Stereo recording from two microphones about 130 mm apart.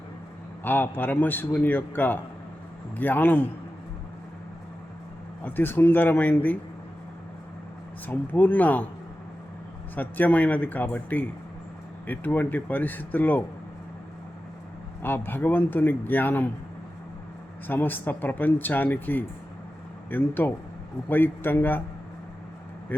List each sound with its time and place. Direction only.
0.6 s speech: 15° left (ahead or behind)
5.4 s speech: 15° left (ahead or behind)
8.0 s speech: 15° left (ahead or behind)
9.9 s speech: 15° left (ahead or behind)
15.0 s speech: 15° left (ahead or behind)
17.7 s speech: 15° left (ahead or behind)
22.9 s speech: 15° left (ahead or behind)